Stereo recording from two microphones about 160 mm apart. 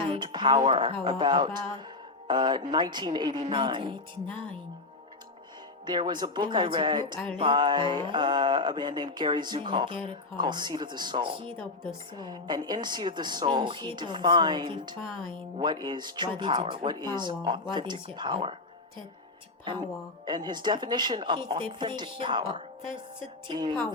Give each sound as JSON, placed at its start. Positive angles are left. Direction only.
{"t": 0.0, "sound": "a sound", "side_deg": -35}
{"t": 1.2, "sound": "a woman's voice", "side_deg": -30}
{"t": 5.8, "sound": "a woman's voice", "side_deg": -30}
{"t": 20.2, "sound": "a woman's voice", "side_deg": -25}